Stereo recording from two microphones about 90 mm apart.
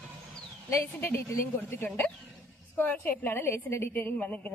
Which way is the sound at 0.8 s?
25° left (ahead or behind).